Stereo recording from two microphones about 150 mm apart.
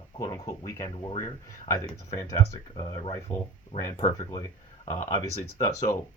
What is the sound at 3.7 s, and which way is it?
Speech, 55° left (ahead or behind).